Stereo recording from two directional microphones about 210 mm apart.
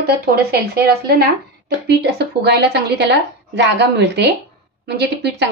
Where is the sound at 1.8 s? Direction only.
50° right (ahead or behind).